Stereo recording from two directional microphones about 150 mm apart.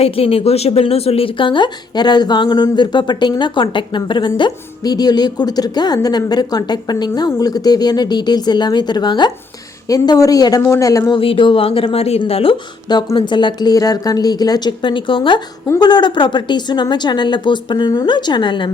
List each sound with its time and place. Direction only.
0.0 s speech: 40° left (ahead or behind); by 11.2 s 25° left (ahead or behind)
11.2 s speech: 35° left (ahead or behind)
15.6 s speech: 25° left (ahead or behind)